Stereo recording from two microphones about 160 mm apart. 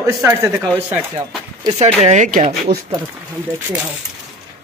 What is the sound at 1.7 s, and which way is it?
Speech, 40° right (ahead or behind).